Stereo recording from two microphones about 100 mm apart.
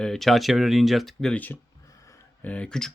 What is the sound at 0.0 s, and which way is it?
Speech, 5° left (ahead or behind).